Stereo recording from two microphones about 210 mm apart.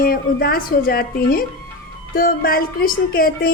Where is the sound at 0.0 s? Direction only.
45° left (ahead or behind).